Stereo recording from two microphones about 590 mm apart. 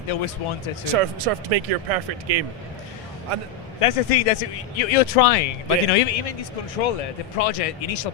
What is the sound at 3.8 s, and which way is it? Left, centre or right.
Speech, left.